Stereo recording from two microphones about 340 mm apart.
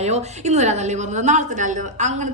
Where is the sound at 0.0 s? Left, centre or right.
Centre.